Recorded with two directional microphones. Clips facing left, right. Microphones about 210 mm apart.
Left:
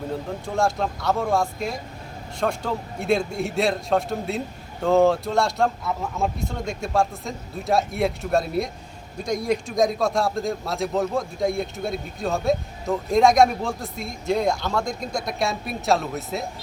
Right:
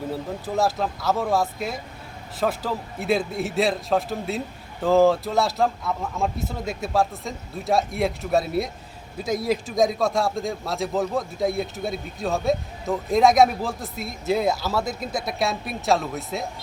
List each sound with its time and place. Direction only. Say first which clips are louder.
0.1 s a man's voice: even; 5° right (ahead or behind)